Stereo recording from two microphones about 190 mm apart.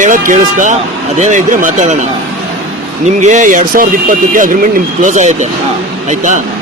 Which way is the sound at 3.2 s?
40° right (ahead or behind).